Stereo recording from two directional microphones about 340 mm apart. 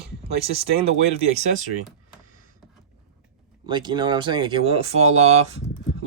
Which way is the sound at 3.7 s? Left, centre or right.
Centre.